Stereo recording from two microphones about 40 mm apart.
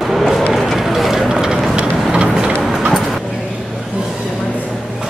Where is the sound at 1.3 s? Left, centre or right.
Centre.